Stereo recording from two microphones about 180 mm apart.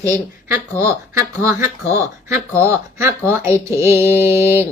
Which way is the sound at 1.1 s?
15° right (ahead or behind).